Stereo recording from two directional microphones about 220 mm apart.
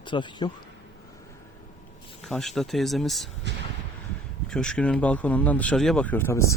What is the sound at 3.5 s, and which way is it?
Vehicle, 55° right (ahead or behind).